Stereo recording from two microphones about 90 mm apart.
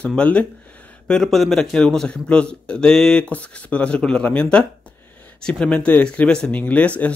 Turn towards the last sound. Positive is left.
turn(degrees=15)  # may be behind; listen again after turning